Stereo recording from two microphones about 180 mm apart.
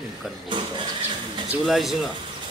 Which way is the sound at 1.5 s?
Centre (ahead or behind).